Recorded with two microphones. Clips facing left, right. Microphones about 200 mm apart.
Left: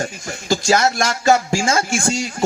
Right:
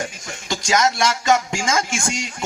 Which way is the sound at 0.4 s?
35° left (ahead or behind).